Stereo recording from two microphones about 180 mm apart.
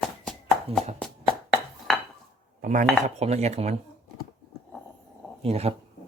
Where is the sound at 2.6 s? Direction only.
45° right (ahead or behind).